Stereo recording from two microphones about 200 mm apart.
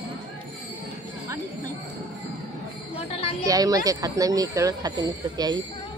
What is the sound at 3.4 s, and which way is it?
Speech, 20° right (ahead or behind).